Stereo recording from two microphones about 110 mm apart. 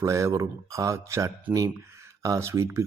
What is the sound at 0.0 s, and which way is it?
Speech, 25° right (ahead or behind).